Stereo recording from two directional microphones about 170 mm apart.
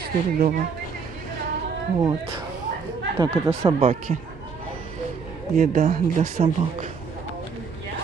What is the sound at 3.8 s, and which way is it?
Speech, 40° right (ahead or behind).